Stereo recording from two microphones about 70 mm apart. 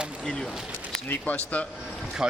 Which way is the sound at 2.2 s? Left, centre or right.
Centre.